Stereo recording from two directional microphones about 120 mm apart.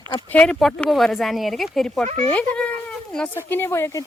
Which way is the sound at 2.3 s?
10° left (ahead or behind).